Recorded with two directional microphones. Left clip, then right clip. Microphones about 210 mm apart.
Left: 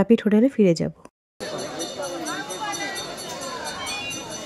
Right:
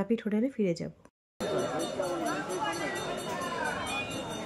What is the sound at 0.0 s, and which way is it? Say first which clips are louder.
Speech: left 12 dB; 40° left (ahead or behind).